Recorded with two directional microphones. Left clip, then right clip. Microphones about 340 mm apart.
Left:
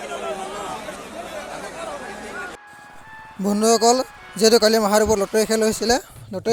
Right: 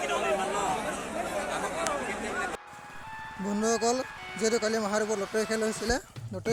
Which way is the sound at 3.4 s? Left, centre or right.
Left.